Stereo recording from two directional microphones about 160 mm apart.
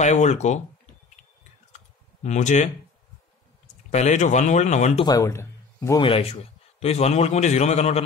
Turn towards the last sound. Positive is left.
turn(degrees=45)  # may be behind; listen again after turning